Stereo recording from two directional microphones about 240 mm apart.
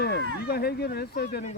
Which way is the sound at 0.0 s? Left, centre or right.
Left.